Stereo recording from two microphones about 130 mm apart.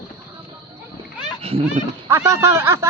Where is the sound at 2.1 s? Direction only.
20° right (ahead or behind).